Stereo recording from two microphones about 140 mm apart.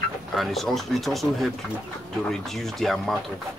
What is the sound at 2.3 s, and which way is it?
Speech, centre (ahead or behind).